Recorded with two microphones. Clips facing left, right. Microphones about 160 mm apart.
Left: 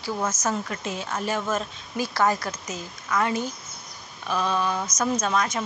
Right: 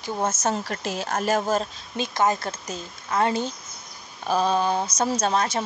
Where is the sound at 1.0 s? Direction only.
45° right (ahead or behind).